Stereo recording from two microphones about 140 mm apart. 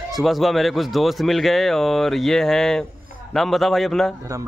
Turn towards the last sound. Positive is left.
turn(degrees=0)  # may be behind; listen again after turning